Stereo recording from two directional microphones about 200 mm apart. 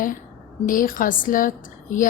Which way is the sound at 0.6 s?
45° left (ahead or behind).